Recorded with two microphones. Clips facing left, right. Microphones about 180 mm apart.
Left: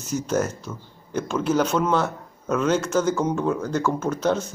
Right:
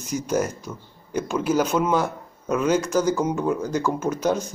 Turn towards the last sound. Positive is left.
turn(degrees=-10)  # may be behind; listen again after turning